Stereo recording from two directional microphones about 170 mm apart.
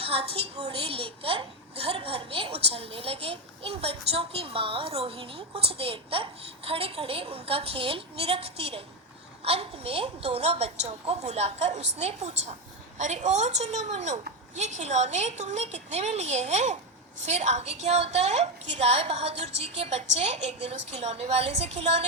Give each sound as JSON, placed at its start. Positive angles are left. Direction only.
{"t": 0.0, "sound": "a woman's voice", "side_deg": -35}